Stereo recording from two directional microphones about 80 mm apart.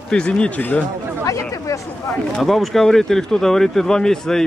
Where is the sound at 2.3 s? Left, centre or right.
Centre.